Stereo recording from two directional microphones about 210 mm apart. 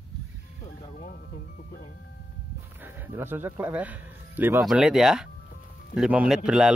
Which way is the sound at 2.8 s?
10° right (ahead or behind).